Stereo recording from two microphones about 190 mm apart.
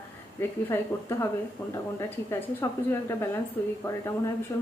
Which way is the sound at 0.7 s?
10° left (ahead or behind).